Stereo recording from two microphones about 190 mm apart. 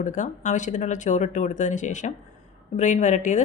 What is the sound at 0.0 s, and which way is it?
Speech, 40° left (ahead or behind).